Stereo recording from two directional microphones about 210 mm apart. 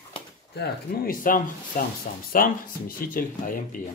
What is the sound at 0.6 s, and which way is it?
Speech, 40° left (ahead or behind).